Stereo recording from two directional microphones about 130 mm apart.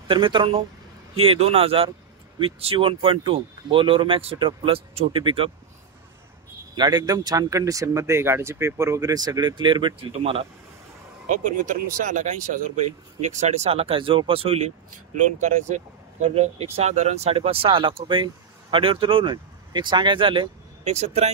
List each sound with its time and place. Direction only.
0.1 s speech: 40° right (ahead or behind)
6.7 s speech: 35° right (ahead or behind)
10.1 s speech: 50° right (ahead or behind)
11.2 s speech: 90° right; by 12.8 s 75° right (ahead or behind)
13.3 s speech: 60° right (ahead or behind)
15.1 s speech: 70° right (ahead or behind); by 20.4 s 40° right (ahead or behind)
20.8 s speech: 60° right (ahead or behind)